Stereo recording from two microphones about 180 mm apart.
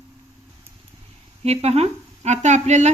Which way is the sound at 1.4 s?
35° right (ahead or behind).